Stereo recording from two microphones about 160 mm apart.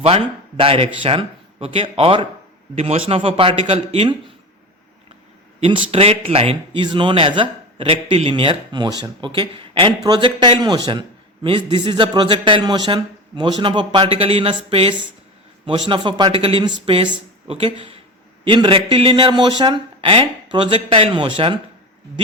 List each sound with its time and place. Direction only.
0.0 s a man's voice: 35° right (ahead or behind)
5.5 s a man's voice: 35° right (ahead or behind)